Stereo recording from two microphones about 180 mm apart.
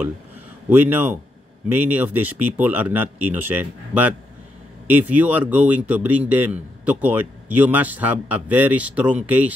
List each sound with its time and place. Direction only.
0.7 s a man's voice: 10° right (ahead or behind)